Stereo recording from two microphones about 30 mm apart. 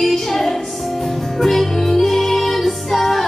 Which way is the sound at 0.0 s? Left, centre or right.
Centre.